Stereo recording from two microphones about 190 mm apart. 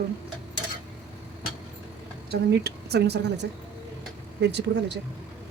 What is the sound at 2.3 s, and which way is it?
Speech, 60° right (ahead or behind).